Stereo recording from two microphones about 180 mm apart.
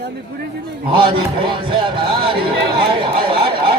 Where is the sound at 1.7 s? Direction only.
30° right (ahead or behind).